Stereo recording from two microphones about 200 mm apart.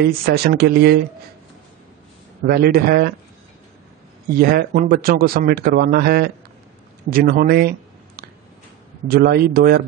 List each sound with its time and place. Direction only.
0.0 s speech: 50° right (ahead or behind)
2.4 s speech: 50° right (ahead or behind)
4.3 s speech: 50° right (ahead or behind)
9.0 s speech: 50° right (ahead or behind)